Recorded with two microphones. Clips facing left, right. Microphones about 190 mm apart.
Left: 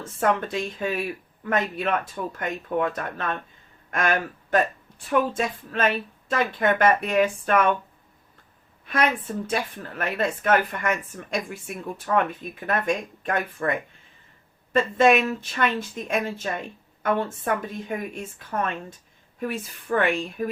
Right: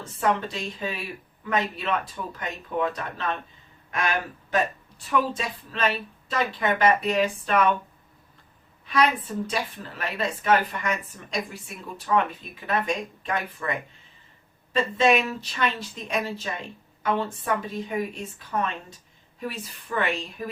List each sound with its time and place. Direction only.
0.2 s speech: 50° left (ahead or behind)
8.9 s speech: 50° left (ahead or behind)